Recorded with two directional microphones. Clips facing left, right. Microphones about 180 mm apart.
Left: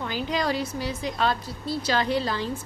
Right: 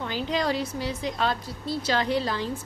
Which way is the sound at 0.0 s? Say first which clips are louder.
Even; 25° right (ahead or behind).